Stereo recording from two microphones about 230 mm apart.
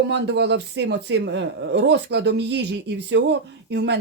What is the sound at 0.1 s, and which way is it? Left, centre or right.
Speech, right.